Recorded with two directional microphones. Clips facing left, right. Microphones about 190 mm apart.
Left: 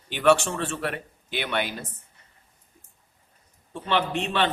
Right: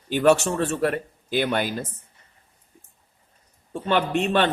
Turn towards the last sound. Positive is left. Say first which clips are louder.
# right 4 dB
turn(degrees=-50)  # may be behind; listen again after turning